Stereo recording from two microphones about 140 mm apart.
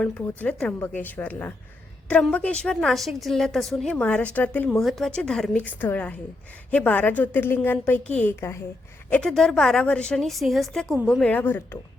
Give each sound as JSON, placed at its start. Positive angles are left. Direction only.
{"t": 0.0, "sound": "a woman's voice", "side_deg": 10}
{"t": 4.8, "sound": "a woman's voice", "side_deg": 0}